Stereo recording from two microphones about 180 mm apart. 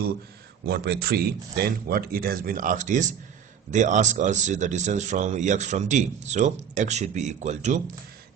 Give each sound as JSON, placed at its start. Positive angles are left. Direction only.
{"t": 0.6, "sound": "speech", "side_deg": -60}